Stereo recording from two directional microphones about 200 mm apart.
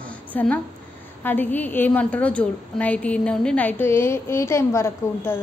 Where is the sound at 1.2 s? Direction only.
10° left (ahead or behind).